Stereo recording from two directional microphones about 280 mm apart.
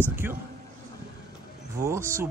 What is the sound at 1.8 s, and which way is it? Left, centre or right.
Speech, centre.